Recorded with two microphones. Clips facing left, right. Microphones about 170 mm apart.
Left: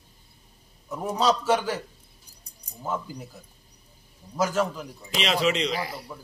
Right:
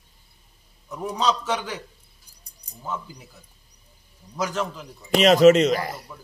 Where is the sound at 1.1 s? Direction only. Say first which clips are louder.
Left 1 dB; 5° left (ahead or behind).